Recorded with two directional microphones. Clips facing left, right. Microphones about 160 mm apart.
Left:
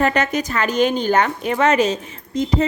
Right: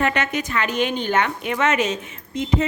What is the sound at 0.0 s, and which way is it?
A woman's voice, 40° left (ahead or behind).